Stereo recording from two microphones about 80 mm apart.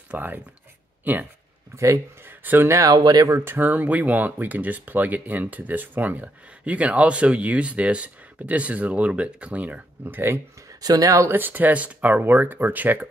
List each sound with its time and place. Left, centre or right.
0.1 s speech: right
1.8 s speech: right
2.8 s speech: right
3.3 s speech: right
10.7 s speech: right
11.3 s speech: right